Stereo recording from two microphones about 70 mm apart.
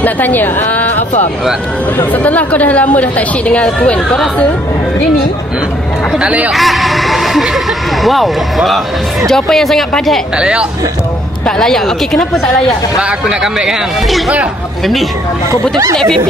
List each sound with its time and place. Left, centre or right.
0.0 s a woman's voice: left
2.0 s a woman's voice: left
6.1 s speech: centre
6.5 s speech: centre
10.3 s speech: centre
11.4 s speech: centre
13.0 s speech: centre